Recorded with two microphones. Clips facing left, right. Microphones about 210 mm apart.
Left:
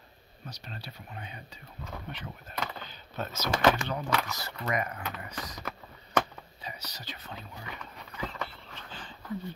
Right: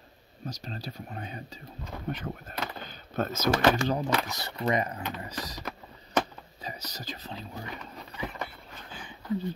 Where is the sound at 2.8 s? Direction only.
50° right (ahead or behind).